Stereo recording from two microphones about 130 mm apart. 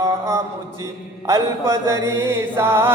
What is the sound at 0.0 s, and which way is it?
Mantra, 25° right (ahead or behind).